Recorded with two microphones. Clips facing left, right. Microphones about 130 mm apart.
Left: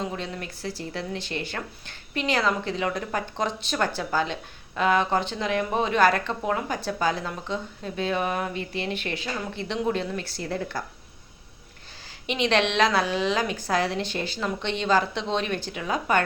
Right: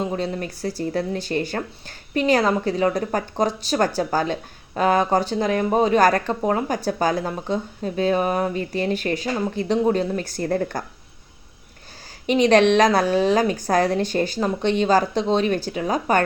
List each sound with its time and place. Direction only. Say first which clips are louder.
0.0 s a woman's voice: right 7 dB; 35° right (ahead or behind)
12.2 s a woman's voice: right 8 dB; 45° right (ahead or behind)